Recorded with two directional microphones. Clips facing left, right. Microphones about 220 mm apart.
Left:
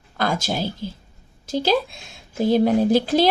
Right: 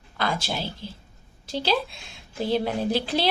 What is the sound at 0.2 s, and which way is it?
Speech, 45° left (ahead or behind).